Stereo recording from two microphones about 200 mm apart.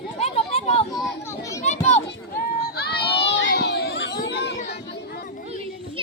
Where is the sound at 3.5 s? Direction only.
55° left (ahead or behind).